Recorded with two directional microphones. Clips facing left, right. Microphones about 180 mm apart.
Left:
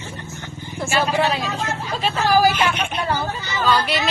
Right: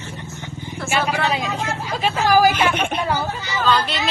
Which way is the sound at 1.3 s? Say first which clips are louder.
Right 1 dB; 15° right (ahead or behind).